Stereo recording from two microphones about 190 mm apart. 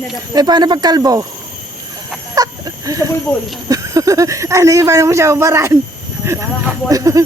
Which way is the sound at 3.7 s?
15° right (ahead or behind).